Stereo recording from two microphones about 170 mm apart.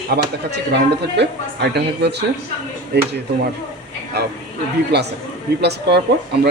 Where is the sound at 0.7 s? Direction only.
90° right.